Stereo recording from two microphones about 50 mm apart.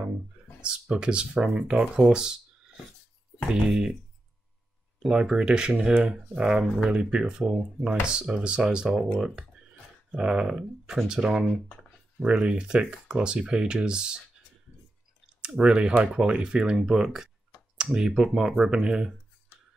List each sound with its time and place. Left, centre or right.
0.6 s speech: centre
5.0 s speech: centre
10.5 s speech: centre
11.1 s speech: centre
15.4 s speech: centre
16.2 s speech: centre